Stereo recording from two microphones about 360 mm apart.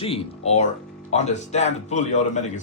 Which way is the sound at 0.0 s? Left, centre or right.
Centre.